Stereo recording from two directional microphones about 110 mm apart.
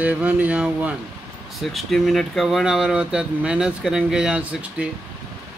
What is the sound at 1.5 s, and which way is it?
Speech, centre (ahead or behind).